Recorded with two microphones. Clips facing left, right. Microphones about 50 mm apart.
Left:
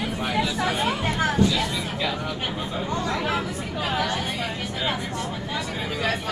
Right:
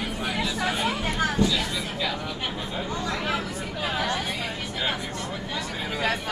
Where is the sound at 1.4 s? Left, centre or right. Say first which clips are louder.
Left 2 dB; right.